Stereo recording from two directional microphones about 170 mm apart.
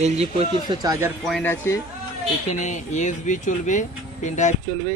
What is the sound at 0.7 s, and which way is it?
Speech, 20° right (ahead or behind).